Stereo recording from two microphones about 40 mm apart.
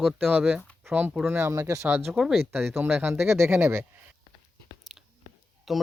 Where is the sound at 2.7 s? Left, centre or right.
Right.